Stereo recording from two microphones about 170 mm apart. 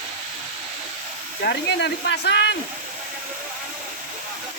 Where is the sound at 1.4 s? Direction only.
90° left.